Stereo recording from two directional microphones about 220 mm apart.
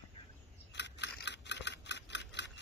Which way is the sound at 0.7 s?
50° left (ahead or behind).